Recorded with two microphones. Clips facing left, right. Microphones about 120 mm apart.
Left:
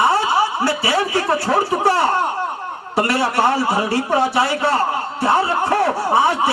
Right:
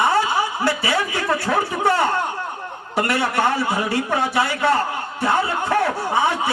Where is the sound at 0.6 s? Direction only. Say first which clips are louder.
Left 2 dB; 30° left (ahead or behind).